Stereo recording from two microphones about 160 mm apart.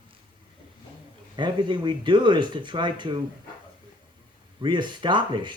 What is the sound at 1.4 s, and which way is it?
Speech, 30° right (ahead or behind).